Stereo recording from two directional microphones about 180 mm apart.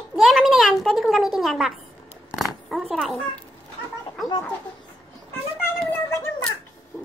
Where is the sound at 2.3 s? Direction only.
Centre (ahead or behind).